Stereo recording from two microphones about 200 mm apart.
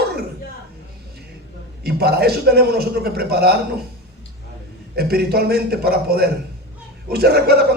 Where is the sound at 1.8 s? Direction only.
50° right (ahead or behind).